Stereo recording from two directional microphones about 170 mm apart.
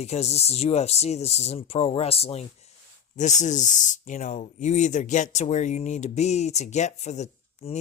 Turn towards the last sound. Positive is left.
turn(degrees=40)  # may be behind; listen again after turning